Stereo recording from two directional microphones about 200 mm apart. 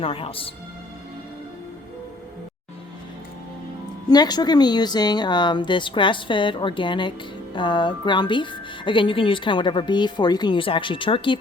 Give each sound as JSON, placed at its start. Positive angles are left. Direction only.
{"t": 0.0, "sound": "speech", "side_deg": 25}
{"t": 4.1, "sound": "speech", "side_deg": 20}